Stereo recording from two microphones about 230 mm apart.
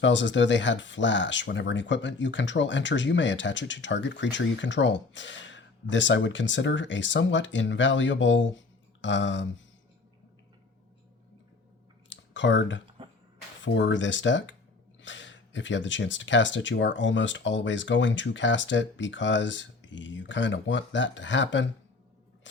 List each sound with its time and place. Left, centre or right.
0.0 s speech: left
12.0 s computer keyboard: left
13.7 s speech: left